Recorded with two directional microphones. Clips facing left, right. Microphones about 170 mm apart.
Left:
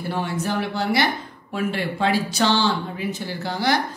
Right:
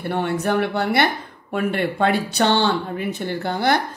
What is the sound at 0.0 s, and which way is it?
Speech, 60° right (ahead or behind).